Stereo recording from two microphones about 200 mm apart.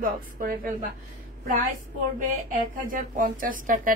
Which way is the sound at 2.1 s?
40° right (ahead or behind).